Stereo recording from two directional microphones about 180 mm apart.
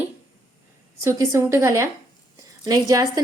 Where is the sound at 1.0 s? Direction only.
15° right (ahead or behind).